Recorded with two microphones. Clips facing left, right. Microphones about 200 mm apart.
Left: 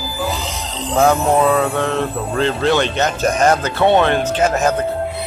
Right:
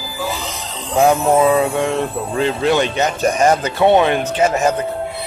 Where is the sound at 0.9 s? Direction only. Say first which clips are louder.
Right 1 dB; 15° right (ahead or behind).